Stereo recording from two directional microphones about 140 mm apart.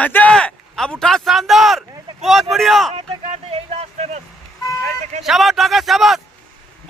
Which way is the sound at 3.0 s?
45° right (ahead or behind).